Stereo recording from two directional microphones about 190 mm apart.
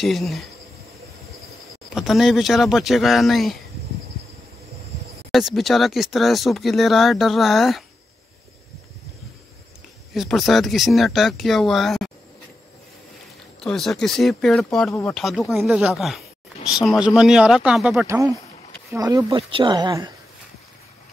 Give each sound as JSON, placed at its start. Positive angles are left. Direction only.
{"t": 0.0, "sound": "speech", "side_deg": 0}
{"t": 2.0, "sound": "speech", "side_deg": 0}
{"t": 5.3, "sound": "speech", "side_deg": 0}
{"t": 10.1, "sound": "speech", "side_deg": 0}
{"t": 13.6, "sound": "speech", "side_deg": 0}
{"t": 18.0, "sound": "speech", "side_deg": -15}